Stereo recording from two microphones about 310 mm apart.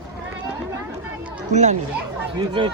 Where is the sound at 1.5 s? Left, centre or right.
Right.